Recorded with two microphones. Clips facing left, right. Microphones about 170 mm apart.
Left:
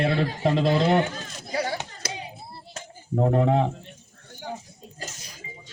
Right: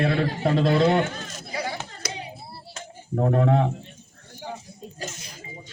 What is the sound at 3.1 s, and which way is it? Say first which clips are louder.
Speech: even; 15° left (ahead or behind).